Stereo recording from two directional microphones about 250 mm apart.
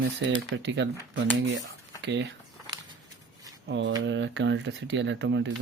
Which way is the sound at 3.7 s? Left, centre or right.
Right.